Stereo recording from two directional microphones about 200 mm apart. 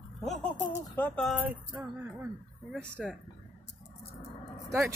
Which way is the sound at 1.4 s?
10° right (ahead or behind).